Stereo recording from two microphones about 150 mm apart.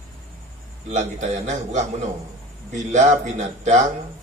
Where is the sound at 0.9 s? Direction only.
55° right (ahead or behind).